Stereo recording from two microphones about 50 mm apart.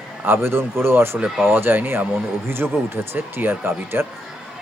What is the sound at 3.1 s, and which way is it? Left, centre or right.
Speech, right.